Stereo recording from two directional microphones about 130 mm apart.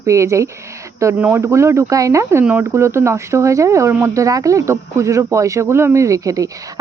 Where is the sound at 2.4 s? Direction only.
15° right (ahead or behind).